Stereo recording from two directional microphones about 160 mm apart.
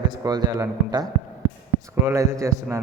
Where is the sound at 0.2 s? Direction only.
20° right (ahead or behind).